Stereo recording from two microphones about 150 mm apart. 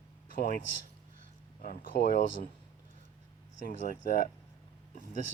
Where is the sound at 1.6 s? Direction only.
70° left (ahead or behind).